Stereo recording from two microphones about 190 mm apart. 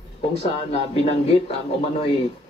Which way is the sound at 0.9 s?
30° left (ahead or behind).